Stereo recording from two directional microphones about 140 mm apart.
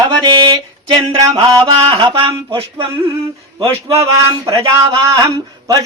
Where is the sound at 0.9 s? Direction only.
30° right (ahead or behind).